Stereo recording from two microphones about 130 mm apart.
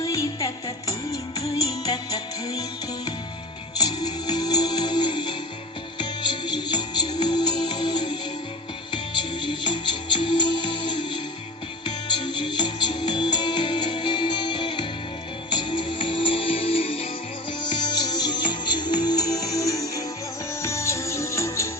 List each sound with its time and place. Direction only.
0.0 s music: 25° left (ahead or behind); by 17.1 s 50° left (ahead or behind)
17.6 s music: 35° left (ahead or behind)